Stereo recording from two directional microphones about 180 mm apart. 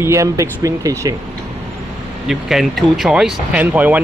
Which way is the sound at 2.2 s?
Centre (ahead or behind).